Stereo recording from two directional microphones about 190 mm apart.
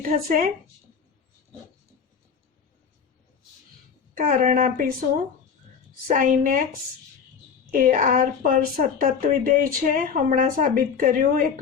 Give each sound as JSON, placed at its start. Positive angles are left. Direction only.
{"t": 0.0, "sound": "a woman's voice", "side_deg": -50}
{"t": 4.2, "sound": "a woman's voice", "side_deg": -45}
{"t": 6.1, "sound": "a woman's voice", "side_deg": -45}
{"t": 7.7, "sound": "a woman's voice", "side_deg": -45}